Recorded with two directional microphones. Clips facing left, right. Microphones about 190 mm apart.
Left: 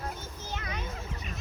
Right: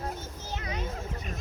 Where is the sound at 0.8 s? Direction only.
40° right (ahead or behind).